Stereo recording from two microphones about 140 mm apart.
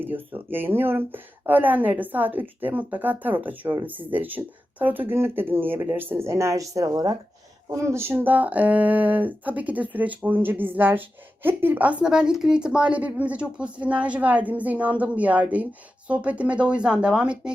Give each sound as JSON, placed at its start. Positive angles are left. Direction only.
{"t": 0.0, "sound": "speech", "side_deg": -15}